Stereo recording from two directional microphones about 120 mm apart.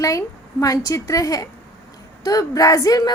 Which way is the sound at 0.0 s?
30° left (ahead or behind).